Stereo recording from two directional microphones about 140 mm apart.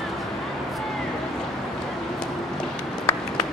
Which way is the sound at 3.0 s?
25° left (ahead or behind).